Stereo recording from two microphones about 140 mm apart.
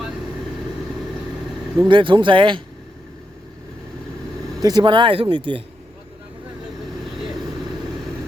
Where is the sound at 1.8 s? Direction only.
35° right (ahead or behind).